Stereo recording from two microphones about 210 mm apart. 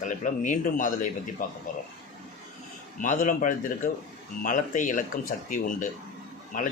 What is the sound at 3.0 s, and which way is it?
A man's voice, 40° left (ahead or behind).